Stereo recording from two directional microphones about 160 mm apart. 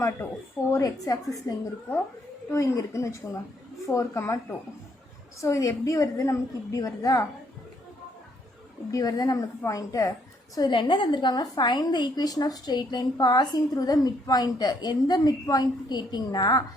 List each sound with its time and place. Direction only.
0.2 s a woman's voice: 20° left (ahead or behind)
8.9 s a woman's voice: 25° left (ahead or behind)